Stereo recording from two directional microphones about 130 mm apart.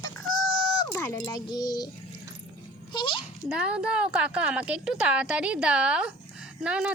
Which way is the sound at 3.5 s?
10° right (ahead or behind).